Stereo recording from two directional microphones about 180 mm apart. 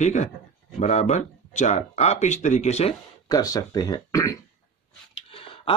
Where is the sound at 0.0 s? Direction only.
40° left (ahead or behind).